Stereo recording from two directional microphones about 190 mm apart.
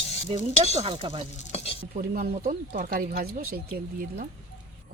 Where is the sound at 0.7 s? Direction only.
30° right (ahead or behind).